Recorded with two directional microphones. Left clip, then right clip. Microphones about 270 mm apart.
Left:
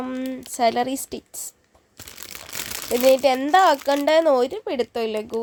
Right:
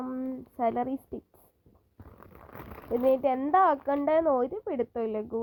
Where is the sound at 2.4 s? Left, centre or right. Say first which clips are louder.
Left 13 dB; centre.